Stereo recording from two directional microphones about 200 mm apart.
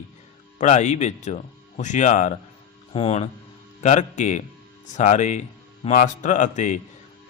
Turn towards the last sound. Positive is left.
turn(degrees=35)  # may be behind; listen again after turning